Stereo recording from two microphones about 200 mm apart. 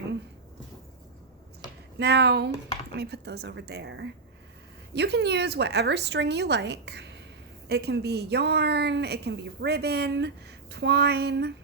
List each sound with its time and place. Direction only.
2.0 s a woman's voice: 55° right (ahead or behind)